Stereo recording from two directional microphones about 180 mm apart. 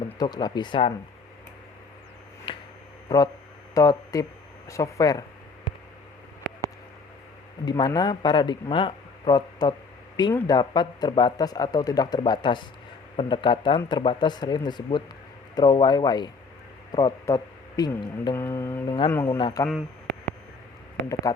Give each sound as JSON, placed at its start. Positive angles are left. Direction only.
{"t": 0.2, "sound": "speech", "side_deg": 25}
{"t": 2.5, "sound": "a sound", "side_deg": 30}
{"t": 3.1, "sound": "speech", "side_deg": 20}
{"t": 7.6, "sound": "speech", "side_deg": 25}
{"t": 19.4, "sound": "speech", "side_deg": 25}
{"t": 21.3, "sound": "speech", "side_deg": 20}